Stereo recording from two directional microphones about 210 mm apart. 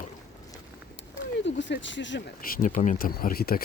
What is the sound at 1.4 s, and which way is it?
Speech, 60° left (ahead or behind).